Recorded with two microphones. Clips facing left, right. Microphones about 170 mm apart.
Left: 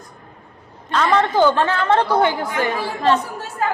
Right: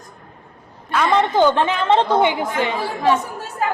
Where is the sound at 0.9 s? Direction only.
10° right (ahead or behind).